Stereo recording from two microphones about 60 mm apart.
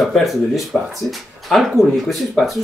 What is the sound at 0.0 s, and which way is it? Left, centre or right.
Speech, centre.